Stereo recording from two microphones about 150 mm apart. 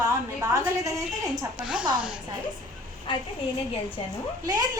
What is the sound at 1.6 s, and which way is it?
Speech, 5° right (ahead or behind).